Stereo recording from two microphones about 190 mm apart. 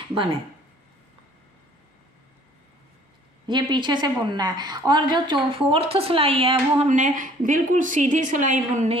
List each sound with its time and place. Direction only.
0.1 s speech: 25° right (ahead or behind)
3.4 s a woman's voice: 25° right (ahead or behind)